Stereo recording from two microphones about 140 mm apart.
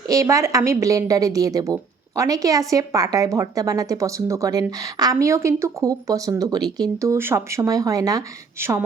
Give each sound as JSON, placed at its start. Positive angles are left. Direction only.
{"t": 0.1, "sound": "a woman's voice", "side_deg": -25}